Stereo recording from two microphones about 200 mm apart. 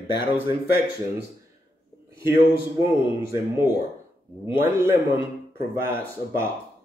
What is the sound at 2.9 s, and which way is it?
A man's voice, 15° right (ahead or behind).